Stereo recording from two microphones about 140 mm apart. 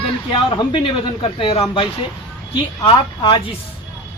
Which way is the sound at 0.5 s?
40° left (ahead or behind).